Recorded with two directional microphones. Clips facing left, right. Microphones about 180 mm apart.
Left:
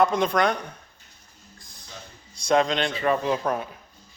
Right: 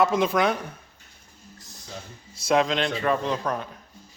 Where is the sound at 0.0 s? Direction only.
5° right (ahead or behind).